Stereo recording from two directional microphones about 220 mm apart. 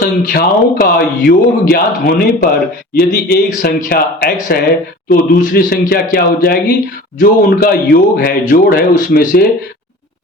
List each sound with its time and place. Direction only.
0.0 s a man's voice: 40° left (ahead or behind)